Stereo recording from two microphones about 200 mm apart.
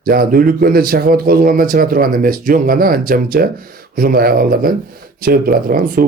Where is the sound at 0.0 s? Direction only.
45° right (ahead or behind).